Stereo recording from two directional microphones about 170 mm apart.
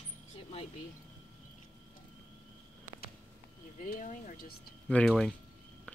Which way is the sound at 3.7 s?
50° left (ahead or behind).